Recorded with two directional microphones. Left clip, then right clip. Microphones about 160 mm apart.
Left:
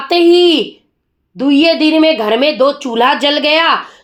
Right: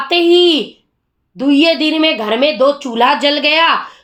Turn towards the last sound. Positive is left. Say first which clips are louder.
# left 1 dB
turn(degrees=35)  # may be behind; listen again after turning